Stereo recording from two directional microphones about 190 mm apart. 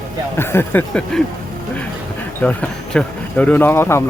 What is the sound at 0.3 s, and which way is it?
Speech, 10° left (ahead or behind).